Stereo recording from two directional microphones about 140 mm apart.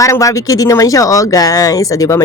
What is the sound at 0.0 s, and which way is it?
Speech, 25° left (ahead or behind).